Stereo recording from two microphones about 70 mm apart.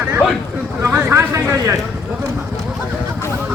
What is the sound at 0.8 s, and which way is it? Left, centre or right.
Chatter, right.